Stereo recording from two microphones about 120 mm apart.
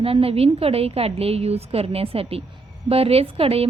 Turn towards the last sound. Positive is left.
turn(degrees=-55)  # may be behind; listen again after turning